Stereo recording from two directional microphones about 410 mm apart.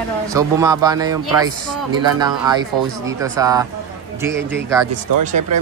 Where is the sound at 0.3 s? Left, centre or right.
Centre.